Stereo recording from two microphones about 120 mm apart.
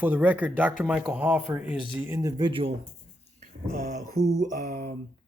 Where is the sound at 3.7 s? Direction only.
80° right.